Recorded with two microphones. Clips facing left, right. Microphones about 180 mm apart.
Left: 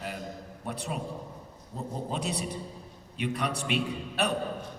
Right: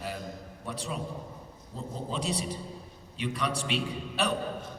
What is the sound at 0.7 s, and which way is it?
Speech, 55° left (ahead or behind).